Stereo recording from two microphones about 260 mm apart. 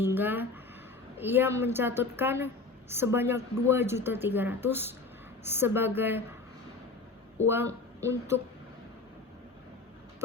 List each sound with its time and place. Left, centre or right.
0.0 s a sound: centre
1.2 s speech: centre
7.4 s speech: centre